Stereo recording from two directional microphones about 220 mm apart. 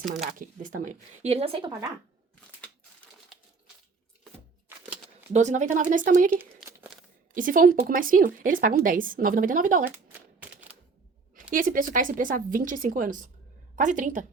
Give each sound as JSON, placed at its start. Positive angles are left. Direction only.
{"t": 0.3, "sound": "speech", "side_deg": -40}
{"t": 3.3, "sound": "typewriter", "side_deg": 0}
{"t": 5.3, "sound": "a woman's voice", "side_deg": -35}
{"t": 7.3, "sound": "a woman's voice", "side_deg": -40}
{"t": 10.1, "sound": "a sound", "side_deg": -5}
{"t": 11.5, "sound": "a woman's voice", "side_deg": -40}